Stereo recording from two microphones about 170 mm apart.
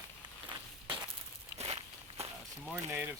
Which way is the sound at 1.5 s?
40° right (ahead or behind).